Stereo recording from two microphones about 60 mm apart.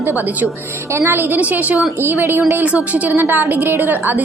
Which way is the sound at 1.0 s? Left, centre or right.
Right.